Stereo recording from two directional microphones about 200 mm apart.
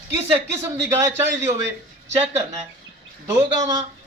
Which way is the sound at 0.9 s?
10° right (ahead or behind).